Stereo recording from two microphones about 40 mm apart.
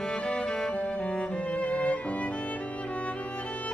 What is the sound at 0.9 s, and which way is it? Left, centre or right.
Music, left.